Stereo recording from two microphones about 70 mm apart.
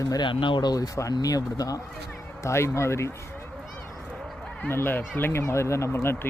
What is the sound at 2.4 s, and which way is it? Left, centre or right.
Speech, left.